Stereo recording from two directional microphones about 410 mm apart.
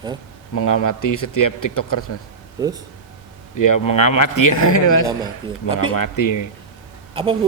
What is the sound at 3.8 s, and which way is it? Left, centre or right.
Speech, left.